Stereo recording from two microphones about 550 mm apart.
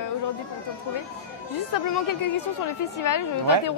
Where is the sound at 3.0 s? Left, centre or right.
Left.